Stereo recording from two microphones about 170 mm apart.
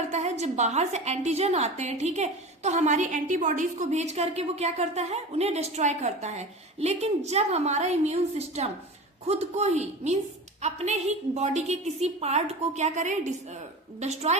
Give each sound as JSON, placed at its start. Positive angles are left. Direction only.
{"t": 0.1, "sound": "a woman's voice", "side_deg": -40}